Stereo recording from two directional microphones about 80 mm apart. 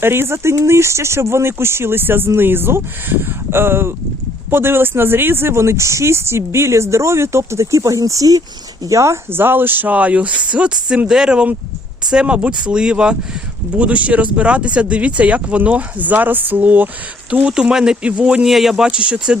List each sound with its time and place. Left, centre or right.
0.0 s speech: right; by 18.4 s centre
18.4 s speech: centre
18.9 s speech: centre